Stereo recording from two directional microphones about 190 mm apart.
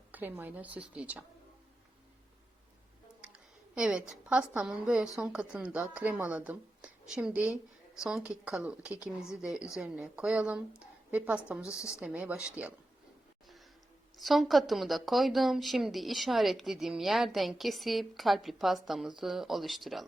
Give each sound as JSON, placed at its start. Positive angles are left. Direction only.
{"t": 0.1, "sound": "a woman's voice", "side_deg": -10}
{"t": 3.2, "sound": "a sound", "side_deg": -5}
{"t": 4.1, "sound": "a woman's voice", "side_deg": -5}
{"t": 11.6, "sound": "a woman's voice", "side_deg": 15}
{"t": 11.9, "sound": "a woman's voice", "side_deg": -5}
{"t": 14.2, "sound": "speech", "side_deg": 0}